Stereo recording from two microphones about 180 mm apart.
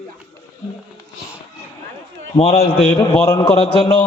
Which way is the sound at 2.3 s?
35° left (ahead or behind).